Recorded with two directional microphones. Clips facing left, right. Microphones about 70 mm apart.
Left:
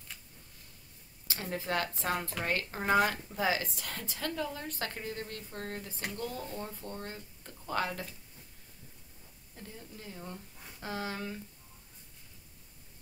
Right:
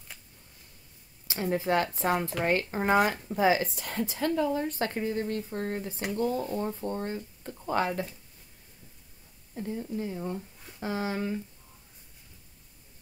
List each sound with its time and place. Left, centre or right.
1.2 s speech: right
9.6 s speech: right